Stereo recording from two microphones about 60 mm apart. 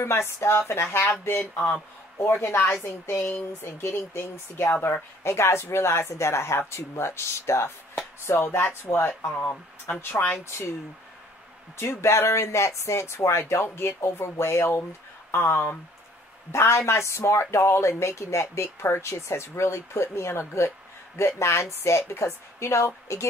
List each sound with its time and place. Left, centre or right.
0.4 s speech: left
1.2 s a sound: left
1.7 s speech: left
2.3 s a sound: left
2.8 s speech: left
11.7 s speech: left